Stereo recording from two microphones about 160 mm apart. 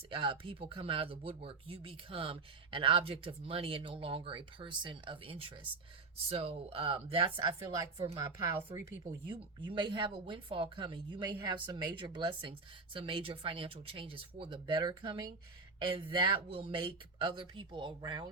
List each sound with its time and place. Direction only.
0.1 s speech: 30° right (ahead or behind)
9.3 s speech: 30° right (ahead or behind)